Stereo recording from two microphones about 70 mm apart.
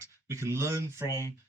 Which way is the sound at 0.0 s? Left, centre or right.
Right.